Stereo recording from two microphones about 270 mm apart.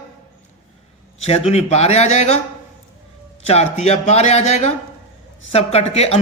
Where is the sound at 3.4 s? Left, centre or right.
Left.